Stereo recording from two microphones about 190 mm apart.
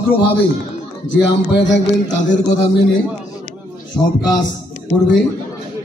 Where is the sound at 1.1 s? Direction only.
70° left (ahead or behind).